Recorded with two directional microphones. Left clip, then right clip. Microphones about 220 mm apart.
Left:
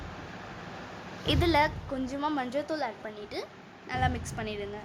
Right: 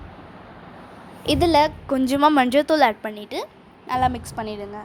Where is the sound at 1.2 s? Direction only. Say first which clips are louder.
Right 8 dB; 30° right (ahead or behind).